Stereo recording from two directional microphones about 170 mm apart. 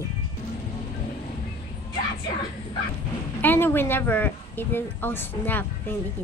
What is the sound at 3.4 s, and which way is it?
A woman's voice, 10° left (ahead or behind).